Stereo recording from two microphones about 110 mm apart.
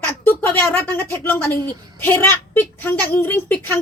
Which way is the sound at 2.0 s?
20° left (ahead or behind).